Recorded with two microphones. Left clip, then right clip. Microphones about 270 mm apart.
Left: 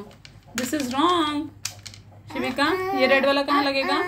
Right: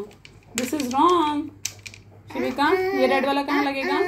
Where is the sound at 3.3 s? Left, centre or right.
Left.